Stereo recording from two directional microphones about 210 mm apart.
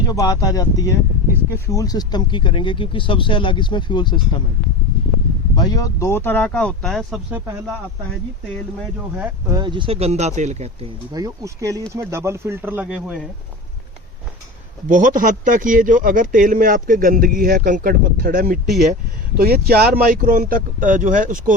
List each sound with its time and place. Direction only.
0.0 s speech: 15° left (ahead or behind)
5.5 s speech: 15° left (ahead or behind); by 7.4 s 5° right (ahead or behind)
9.1 s speech: 10° right (ahead or behind)
9.6 s speech: 25° right (ahead or behind)
11.1 s speech: 15° right (ahead or behind)
14.8 s speech: 40° right (ahead or behind)